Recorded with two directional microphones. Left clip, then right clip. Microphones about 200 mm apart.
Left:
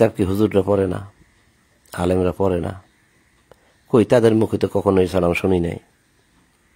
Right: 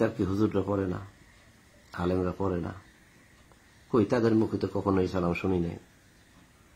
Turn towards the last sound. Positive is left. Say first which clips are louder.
# left 11 dB
turn(degrees=55)  # may be behind; listen again after turning